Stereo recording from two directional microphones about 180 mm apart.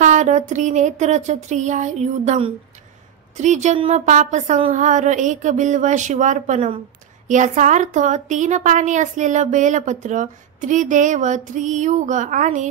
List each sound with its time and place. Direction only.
0.0 s speech: 40° right (ahead or behind)